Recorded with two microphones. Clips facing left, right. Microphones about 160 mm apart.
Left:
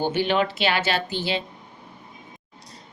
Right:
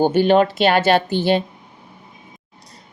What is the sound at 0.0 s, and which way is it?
A woman's voice, 45° right (ahead or behind).